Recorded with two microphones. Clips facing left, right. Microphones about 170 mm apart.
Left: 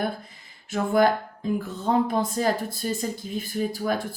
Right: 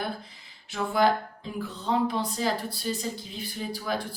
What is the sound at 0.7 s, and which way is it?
Speech, 50° left (ahead or behind).